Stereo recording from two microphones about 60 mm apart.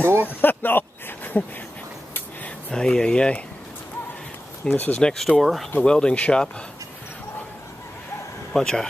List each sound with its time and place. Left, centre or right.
0.0 s speech: right
0.3 s a sound: left
2.7 s speech: centre
4.6 s speech: left
5.0 s speech: centre
5.9 s speech: centre
8.5 s speech: centre